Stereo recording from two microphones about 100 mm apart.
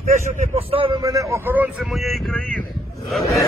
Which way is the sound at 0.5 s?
65° right (ahead or behind).